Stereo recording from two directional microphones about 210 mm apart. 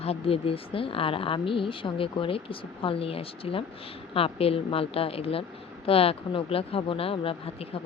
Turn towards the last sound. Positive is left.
turn(degrees=25)  # may be behind; listen again after turning